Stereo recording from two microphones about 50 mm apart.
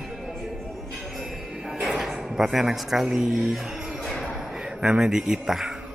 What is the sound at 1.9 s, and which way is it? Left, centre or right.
Speech, centre.